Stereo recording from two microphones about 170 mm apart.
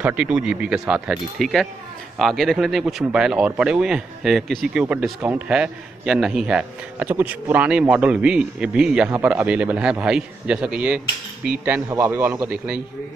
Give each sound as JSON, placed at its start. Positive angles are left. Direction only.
{"t": 0.0, "sound": "a man's voice", "side_deg": -5}